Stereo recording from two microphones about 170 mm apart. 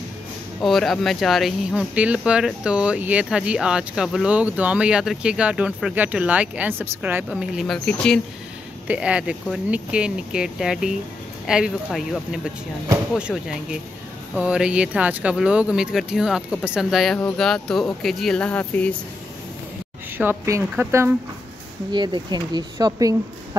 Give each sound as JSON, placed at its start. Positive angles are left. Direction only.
{"t": 0.6, "sound": "speech", "side_deg": 0}
{"t": 8.8, "sound": "speech", "side_deg": -5}
{"t": 20.2, "sound": "a woman's voice", "side_deg": -15}
{"t": 21.9, "sound": "speech", "side_deg": -25}